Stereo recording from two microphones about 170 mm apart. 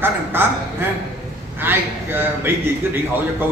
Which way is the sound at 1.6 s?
10° right (ahead or behind).